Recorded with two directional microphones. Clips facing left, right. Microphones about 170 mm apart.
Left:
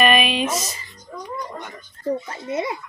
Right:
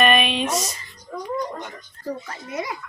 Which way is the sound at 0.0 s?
Centre (ahead or behind).